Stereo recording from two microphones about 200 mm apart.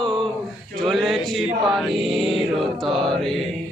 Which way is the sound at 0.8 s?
Centre (ahead or behind).